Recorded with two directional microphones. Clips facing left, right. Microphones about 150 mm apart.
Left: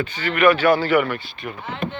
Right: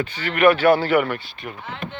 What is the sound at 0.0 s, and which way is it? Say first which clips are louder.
Speech: even; 55° right (ahead or behind).